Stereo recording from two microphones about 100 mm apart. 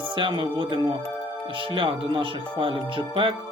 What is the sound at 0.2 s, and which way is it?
Speech, 55° right (ahead or behind).